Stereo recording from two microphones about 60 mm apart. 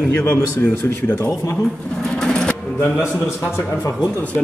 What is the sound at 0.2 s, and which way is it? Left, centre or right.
Speech, left.